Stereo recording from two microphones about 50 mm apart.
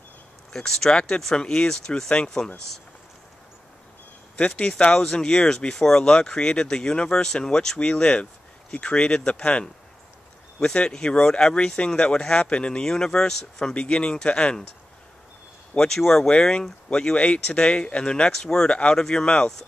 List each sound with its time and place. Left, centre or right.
0.5 s speech: centre
4.4 s speech: left
10.6 s speech: centre
16.0 s speech: centre